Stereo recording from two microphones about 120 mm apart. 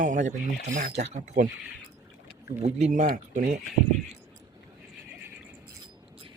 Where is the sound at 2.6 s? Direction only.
75° right (ahead or behind).